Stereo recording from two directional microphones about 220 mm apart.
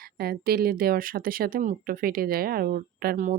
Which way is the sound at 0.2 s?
45° right (ahead or behind).